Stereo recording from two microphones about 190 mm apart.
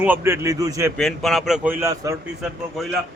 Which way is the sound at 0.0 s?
10° right (ahead or behind).